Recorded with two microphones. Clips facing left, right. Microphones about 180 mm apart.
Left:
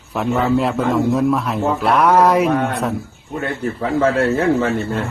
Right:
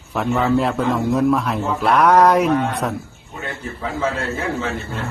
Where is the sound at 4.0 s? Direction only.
55° left (ahead or behind).